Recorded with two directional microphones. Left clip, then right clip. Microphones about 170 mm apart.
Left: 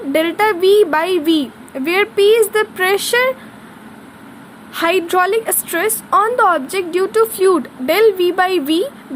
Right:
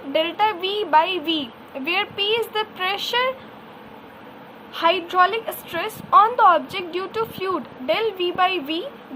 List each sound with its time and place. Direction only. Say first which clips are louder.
0.1 s a woman's voice: left 5 dB; 40° left (ahead or behind)
4.7 s a woman's voice: left 5 dB; 45° left (ahead or behind)